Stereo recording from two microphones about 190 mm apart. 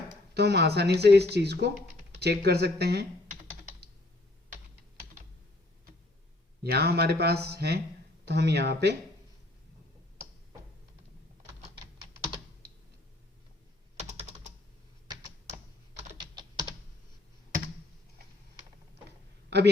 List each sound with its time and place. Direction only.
0.3 s speech: 60° right (ahead or behind)
6.6 s speech: 55° right (ahead or behind)
19.0 s a sound: 60° right (ahead or behind)